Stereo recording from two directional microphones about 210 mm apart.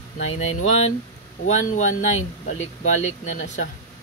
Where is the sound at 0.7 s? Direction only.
30° left (ahead or behind).